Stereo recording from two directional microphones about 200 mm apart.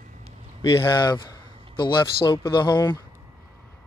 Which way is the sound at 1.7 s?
20° left (ahead or behind).